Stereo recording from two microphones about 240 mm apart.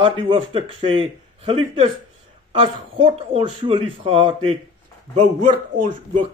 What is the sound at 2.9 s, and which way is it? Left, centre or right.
Speech, right.